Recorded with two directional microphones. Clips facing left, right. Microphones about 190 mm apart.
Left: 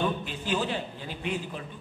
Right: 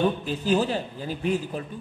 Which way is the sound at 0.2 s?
40° right (ahead or behind).